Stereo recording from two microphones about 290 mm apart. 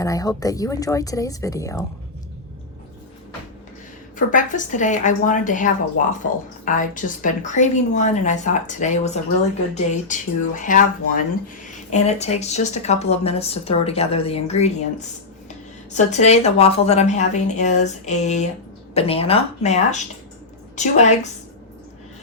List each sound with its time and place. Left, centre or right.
0.0 s speech: centre
4.2 s speech: left
15.9 s speech: left